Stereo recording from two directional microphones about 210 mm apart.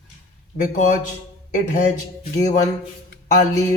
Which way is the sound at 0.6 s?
35° left (ahead or behind).